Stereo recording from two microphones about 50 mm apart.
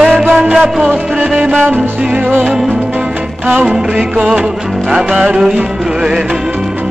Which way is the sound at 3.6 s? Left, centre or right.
Centre.